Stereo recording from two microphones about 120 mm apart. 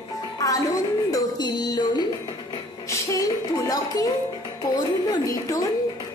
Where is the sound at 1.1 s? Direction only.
35° left (ahead or behind).